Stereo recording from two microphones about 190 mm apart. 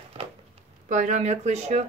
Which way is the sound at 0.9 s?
40° right (ahead or behind).